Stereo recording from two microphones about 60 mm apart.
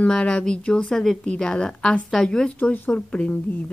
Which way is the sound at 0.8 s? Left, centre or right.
Centre.